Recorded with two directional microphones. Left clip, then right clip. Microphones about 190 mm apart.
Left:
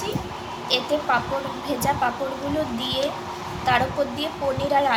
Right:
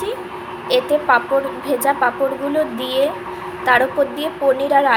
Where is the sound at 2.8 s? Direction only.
20° right (ahead or behind).